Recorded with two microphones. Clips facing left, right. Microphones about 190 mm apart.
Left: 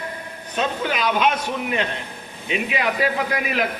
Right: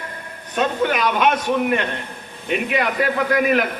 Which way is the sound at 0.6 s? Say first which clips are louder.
Right 4 dB; 55° right (ahead or behind).